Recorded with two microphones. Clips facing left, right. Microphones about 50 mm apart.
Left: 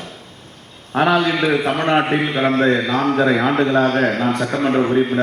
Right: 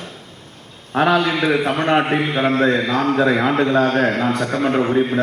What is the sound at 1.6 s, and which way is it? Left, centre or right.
Speech, left.